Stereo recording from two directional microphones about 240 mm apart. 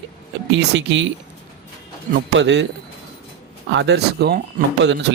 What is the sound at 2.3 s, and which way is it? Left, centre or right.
Speech, right.